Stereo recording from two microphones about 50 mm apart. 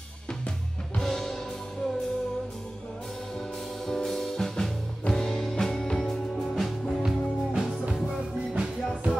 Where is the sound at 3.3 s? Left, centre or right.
Centre.